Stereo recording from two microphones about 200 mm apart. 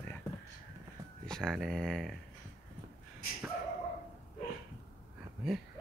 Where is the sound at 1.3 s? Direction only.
Centre (ahead or behind).